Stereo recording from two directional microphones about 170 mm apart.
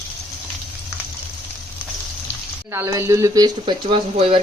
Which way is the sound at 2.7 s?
15° right (ahead or behind).